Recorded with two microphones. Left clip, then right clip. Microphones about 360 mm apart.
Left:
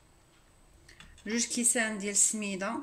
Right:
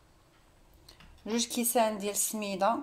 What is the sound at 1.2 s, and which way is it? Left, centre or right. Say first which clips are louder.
Speech: even; centre.